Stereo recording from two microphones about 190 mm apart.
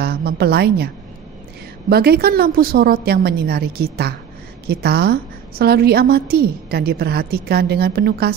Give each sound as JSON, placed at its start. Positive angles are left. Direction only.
{"t": 0.0, "sound": "a woman's voice", "side_deg": -55}
{"t": 1.9, "sound": "a woman's voice", "side_deg": -55}